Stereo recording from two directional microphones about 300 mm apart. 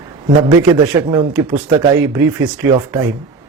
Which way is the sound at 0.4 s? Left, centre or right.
Centre.